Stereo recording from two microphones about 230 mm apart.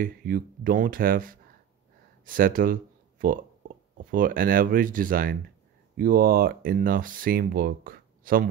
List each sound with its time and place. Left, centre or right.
0.0 s speech: right